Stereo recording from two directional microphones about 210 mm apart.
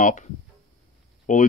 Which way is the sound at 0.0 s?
35° left (ahead or behind).